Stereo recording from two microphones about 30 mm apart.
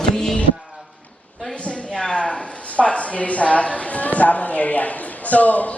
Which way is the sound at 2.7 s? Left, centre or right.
Left.